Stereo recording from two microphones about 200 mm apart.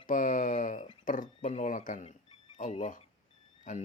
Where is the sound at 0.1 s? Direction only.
40° left (ahead or behind).